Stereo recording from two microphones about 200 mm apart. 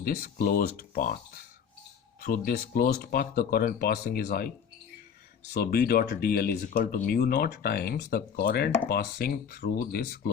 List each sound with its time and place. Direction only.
0.0 s speech: 45° left (ahead or behind)
2.2 s speech: 45° left (ahead or behind)
5.5 s speech: 50° left (ahead or behind)